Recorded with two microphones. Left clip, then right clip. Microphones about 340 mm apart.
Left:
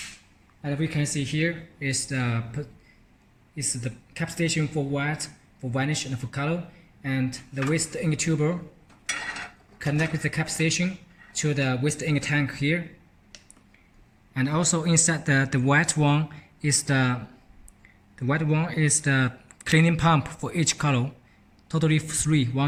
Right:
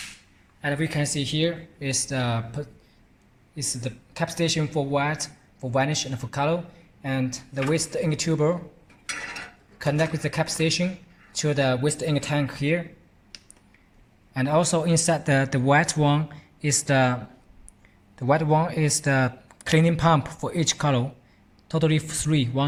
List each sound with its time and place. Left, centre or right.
0.6 s a man's voice: right; by 8.3 s centre
9.7 s speech: centre
14.3 s speech: centre
18.2 s speech: centre